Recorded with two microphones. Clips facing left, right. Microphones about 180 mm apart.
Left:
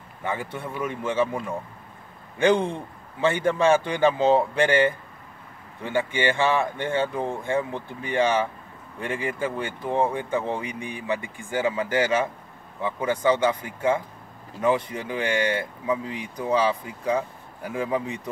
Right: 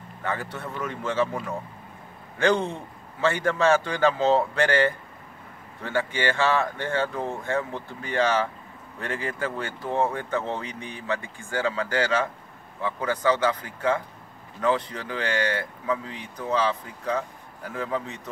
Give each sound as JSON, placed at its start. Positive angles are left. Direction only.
{"t": 0.2, "sound": "speech", "side_deg": 15}